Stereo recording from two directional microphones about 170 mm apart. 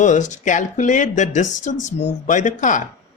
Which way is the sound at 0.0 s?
45° left (ahead or behind).